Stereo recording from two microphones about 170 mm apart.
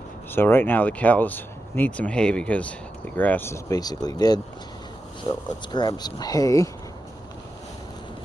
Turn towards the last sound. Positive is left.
turn(degrees=20)  # may be behind; listen again after turning